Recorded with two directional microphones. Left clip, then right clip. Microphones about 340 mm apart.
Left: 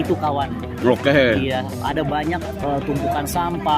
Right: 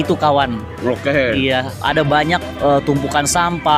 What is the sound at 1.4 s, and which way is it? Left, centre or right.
Speech, right.